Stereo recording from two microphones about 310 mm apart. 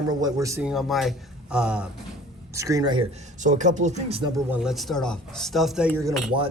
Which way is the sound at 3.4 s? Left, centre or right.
Right.